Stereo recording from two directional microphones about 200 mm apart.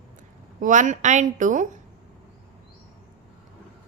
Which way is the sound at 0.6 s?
40° right (ahead or behind).